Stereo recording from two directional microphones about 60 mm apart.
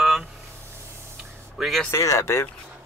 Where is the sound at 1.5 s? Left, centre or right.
Centre.